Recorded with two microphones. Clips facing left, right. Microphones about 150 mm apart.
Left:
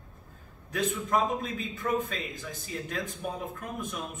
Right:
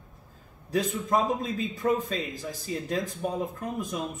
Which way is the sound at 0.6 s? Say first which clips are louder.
Right 3 dB; 35° right (ahead or behind).